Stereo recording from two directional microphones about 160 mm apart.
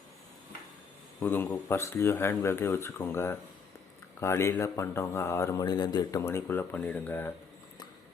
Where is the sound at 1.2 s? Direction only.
15° left (ahead or behind).